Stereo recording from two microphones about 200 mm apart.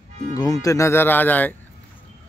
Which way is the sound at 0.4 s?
15° left (ahead or behind).